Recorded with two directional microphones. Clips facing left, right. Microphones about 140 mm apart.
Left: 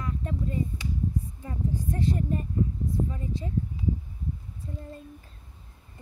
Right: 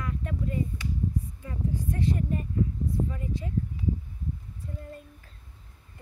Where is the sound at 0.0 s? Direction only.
30° left (ahead or behind).